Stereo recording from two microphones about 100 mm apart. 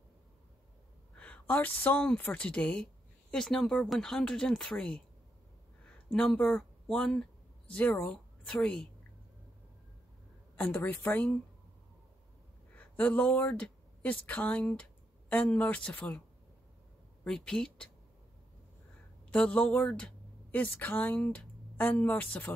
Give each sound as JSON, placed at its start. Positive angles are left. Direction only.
{"t": 1.1, "sound": "a woman's voice", "side_deg": 15}
{"t": 6.0, "sound": "speech", "side_deg": 5}
{"t": 10.5, "sound": "speech", "side_deg": 15}
{"t": 12.7, "sound": "speech", "side_deg": 15}
{"t": 17.2, "sound": "speech", "side_deg": 10}
{"t": 19.3, "sound": "speech", "side_deg": 10}